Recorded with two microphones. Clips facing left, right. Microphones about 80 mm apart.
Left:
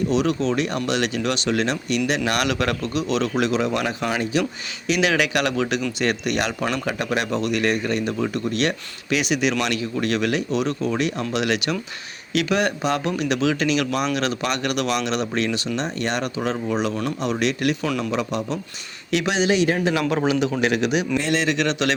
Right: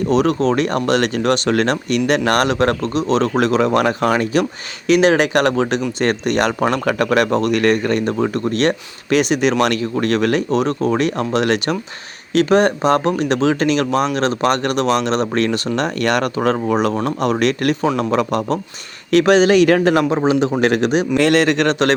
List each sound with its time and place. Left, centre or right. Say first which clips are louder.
0.1 s speech: right 9 dB; right
17.8 s speech: right 6 dB; right
18.1 s speech: right 7 dB; right
20.1 s a man's voice: right 5 dB; right
20.6 s speech: right 5 dB; right
21.2 s speech: right 8 dB; right